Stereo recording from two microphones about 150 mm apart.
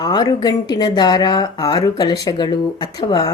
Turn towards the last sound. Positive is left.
turn(degrees=25)  # may be behind; listen again after turning